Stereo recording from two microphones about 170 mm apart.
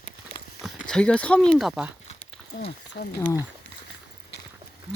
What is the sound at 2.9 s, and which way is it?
Speech, 70° left (ahead or behind).